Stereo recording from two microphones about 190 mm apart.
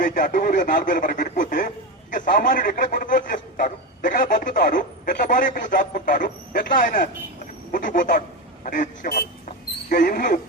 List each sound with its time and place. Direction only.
0.0 s speech: 45° left (ahead or behind)
7.7 s honk: 45° left (ahead or behind)
8.6 s a man's voice: 45° left (ahead or behind)